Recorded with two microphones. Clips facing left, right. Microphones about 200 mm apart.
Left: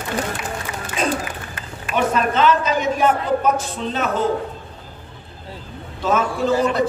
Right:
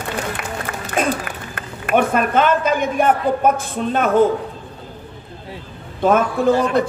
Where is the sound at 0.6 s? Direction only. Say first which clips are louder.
Right 4 dB; 55° right (ahead or behind).